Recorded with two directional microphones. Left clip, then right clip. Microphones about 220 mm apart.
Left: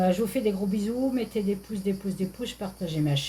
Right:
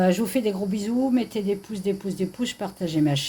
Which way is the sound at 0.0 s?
45° right (ahead or behind).